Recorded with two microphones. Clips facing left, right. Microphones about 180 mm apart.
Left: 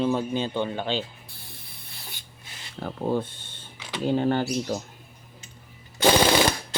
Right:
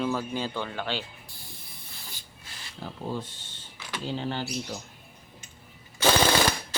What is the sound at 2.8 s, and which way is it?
Speech, 60° left (ahead or behind).